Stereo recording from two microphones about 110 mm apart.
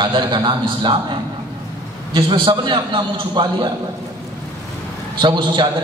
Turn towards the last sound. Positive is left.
turn(degrees=-45)  # may be behind; listen again after turning